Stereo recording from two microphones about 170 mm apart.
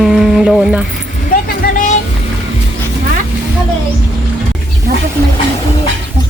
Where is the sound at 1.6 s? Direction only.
55° left (ahead or behind).